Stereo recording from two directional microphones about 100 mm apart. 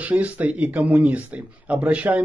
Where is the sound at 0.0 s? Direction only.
15° right (ahead or behind).